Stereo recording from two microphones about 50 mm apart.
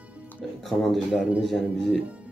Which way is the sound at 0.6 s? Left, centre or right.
Centre.